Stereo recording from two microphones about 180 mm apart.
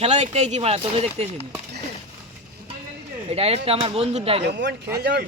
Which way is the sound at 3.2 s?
35° right (ahead or behind).